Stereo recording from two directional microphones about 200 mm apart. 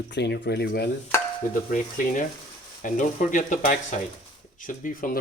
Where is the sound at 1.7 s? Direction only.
40° left (ahead or behind).